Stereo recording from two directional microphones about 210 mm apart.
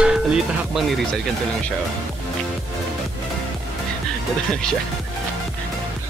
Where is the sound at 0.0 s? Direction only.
5° right (ahead or behind).